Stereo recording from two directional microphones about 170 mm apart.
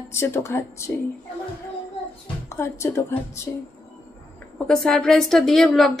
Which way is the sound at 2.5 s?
15° left (ahead or behind).